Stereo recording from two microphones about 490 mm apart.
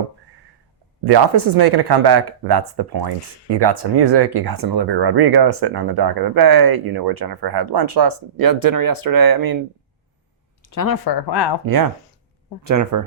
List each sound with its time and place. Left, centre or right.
1.0 s speech: right
10.7 s speech: left
12.6 s speech: right